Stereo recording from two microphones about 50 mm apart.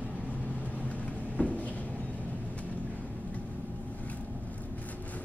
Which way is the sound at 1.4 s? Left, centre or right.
Left.